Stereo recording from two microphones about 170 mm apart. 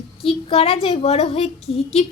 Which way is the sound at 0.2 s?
35° left (ahead or behind).